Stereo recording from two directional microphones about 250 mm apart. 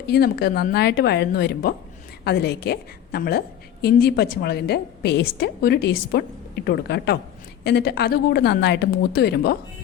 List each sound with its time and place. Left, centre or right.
0.1 s a woman's voice: left